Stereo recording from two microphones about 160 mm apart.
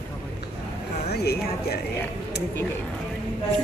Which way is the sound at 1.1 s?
80° left.